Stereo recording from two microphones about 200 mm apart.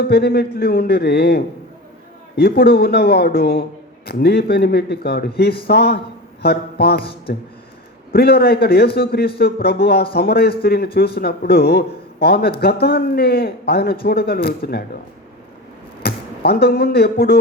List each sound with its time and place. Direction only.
0.1 s speech: 50° left (ahead or behind)
6.4 s a sound: 55° left (ahead or behind)
7.0 s speech: 25° left (ahead or behind)
8.1 s speech: 50° left (ahead or behind)
16.0 s speech: 50° left (ahead or behind)